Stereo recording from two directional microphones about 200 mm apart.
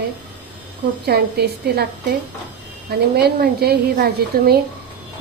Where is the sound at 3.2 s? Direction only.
50° right (ahead or behind).